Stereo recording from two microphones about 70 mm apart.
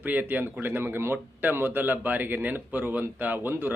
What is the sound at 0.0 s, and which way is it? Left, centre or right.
Speech, right.